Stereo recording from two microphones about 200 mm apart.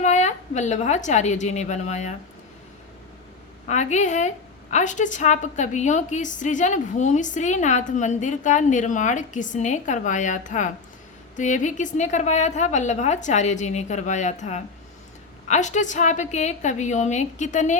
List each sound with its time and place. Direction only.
0.0 s a woman's voice: 35° left (ahead or behind)
3.7 s a woman's voice: 35° left (ahead or behind)